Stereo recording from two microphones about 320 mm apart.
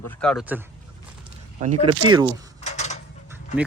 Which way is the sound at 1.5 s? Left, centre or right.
Right.